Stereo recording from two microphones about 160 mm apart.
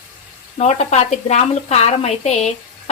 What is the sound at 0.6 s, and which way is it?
A woman's voice, 45° left (ahead or behind).